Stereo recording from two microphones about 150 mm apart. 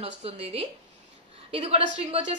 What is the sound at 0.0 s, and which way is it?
A woman's voice, 45° right (ahead or behind).